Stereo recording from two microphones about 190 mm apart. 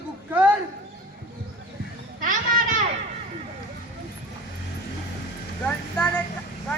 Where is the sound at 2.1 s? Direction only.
45° right (ahead or behind).